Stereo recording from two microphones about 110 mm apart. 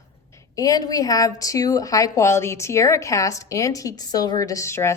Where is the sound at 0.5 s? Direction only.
35° left (ahead or behind).